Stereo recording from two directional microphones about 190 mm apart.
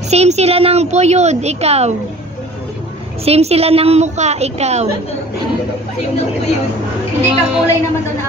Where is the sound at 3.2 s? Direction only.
35° right (ahead or behind).